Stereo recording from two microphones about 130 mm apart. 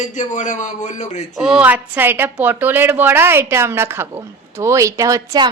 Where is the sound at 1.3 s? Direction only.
5° right (ahead or behind).